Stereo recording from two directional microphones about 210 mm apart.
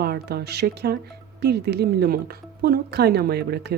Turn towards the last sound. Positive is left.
turn(degrees=-50)  # may be behind; listen again after turning